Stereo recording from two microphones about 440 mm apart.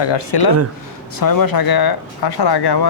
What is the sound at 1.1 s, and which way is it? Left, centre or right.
Speech, left.